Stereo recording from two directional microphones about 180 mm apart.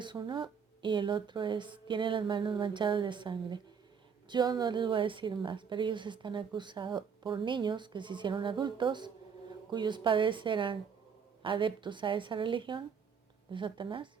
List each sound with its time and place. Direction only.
0.0 s a woman's voice: 25° right (ahead or behind)